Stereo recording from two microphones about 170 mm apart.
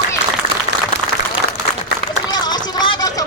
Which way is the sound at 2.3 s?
25° left (ahead or behind).